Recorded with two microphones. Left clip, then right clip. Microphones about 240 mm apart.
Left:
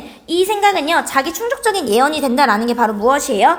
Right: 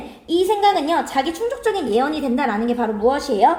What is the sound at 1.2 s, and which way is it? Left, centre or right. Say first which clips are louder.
Speech: left 3 dB; left.